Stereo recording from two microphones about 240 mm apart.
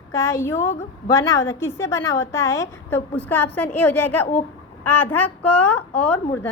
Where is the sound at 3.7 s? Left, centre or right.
Left.